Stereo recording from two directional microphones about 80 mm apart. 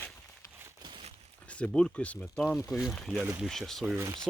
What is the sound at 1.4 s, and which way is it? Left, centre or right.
Speech, centre.